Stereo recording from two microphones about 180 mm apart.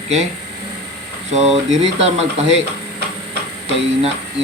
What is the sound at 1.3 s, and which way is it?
Speech, 40° right (ahead or behind).